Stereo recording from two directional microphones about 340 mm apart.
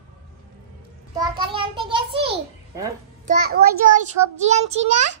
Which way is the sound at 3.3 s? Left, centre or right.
Right.